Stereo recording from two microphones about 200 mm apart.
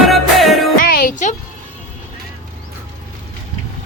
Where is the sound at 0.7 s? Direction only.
45° left (ahead or behind).